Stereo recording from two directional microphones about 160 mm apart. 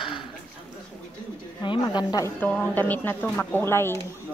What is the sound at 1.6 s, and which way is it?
Speech, 30° left (ahead or behind).